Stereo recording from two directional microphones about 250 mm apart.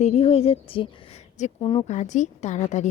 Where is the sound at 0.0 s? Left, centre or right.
Left.